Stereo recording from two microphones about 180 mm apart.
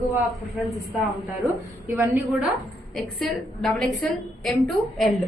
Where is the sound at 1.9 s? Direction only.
10° right (ahead or behind).